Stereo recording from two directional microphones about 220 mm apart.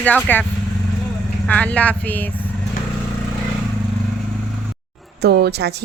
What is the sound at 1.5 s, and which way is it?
Speech, 5° left (ahead or behind).